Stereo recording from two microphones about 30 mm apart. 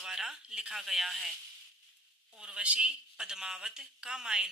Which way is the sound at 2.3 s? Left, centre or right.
Right.